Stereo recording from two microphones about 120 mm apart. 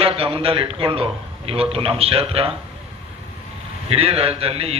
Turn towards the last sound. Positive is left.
turn(degrees=-55)  # may be behind; listen again after turning